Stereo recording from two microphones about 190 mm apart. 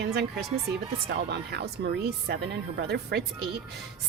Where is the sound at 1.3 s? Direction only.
60° right (ahead or behind).